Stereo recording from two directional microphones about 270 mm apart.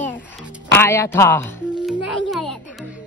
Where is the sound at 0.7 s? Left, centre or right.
Centre.